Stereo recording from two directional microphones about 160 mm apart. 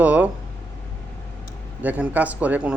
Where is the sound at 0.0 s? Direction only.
10° right (ahead or behind).